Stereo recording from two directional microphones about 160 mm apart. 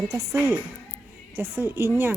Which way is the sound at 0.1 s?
20° right (ahead or behind).